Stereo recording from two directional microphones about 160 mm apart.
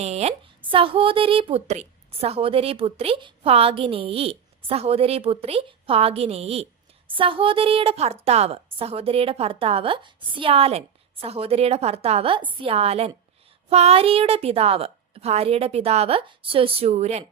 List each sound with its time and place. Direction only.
0.0 s speech: 40° right (ahead or behind)